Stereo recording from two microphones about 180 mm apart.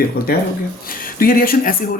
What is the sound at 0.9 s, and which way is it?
Speech, 50° left (ahead or behind).